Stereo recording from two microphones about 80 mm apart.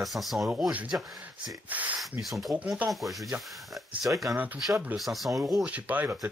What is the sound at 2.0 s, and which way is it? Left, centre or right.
Speech, centre.